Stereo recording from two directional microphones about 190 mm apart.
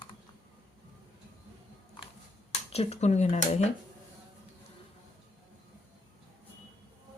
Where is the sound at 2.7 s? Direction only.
35° left (ahead or behind).